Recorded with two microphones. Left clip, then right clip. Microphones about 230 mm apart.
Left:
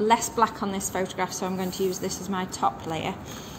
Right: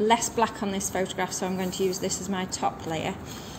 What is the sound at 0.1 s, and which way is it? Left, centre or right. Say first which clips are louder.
A woman's voice: left 1 dB; centre.